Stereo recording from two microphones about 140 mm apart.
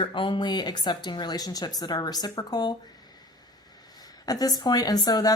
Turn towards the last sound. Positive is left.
turn(degrees=25)  # may be behind; listen again after turning